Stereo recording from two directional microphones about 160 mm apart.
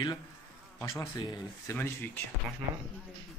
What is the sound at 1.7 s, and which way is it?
Speech, 10° left (ahead or behind).